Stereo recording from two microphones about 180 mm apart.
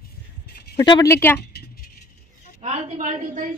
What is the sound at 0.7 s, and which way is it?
Speech, 25° left (ahead or behind).